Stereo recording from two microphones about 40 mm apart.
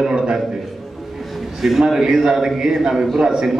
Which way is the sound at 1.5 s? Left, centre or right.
Centre.